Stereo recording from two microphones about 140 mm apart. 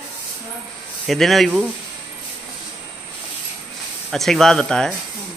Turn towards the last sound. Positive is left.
turn(degrees=5)  # may be behind; listen again after turning